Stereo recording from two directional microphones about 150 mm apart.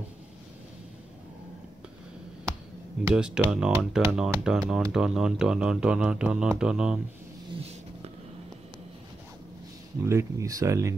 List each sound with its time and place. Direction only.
3.2 s speech: 5° right (ahead or behind)
10.0 s speech: 20° right (ahead or behind)